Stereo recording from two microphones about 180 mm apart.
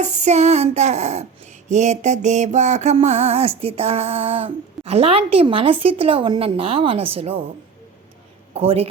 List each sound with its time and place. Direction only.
0.0 s mantra: 40° right (ahead or behind)
8.5 s mantra: 30° right (ahead or behind)